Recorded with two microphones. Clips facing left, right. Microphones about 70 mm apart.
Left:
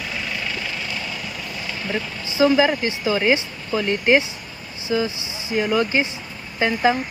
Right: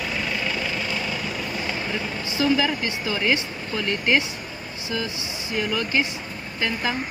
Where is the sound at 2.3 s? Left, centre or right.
Centre.